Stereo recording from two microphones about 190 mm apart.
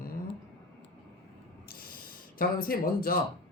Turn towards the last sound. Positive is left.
turn(degrees=50)  # may be behind; listen again after turning